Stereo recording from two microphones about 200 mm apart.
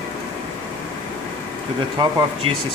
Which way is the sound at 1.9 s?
20° right (ahead or behind).